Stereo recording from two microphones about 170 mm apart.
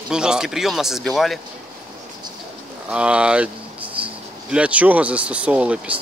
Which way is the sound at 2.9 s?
5° right (ahead or behind).